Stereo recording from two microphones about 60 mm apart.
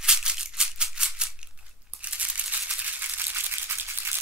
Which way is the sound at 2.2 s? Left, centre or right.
Right.